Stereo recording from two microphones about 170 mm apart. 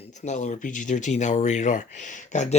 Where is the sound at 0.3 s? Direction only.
45° left (ahead or behind).